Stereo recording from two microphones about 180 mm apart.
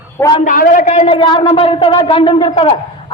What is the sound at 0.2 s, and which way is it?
Speech, 20° left (ahead or behind).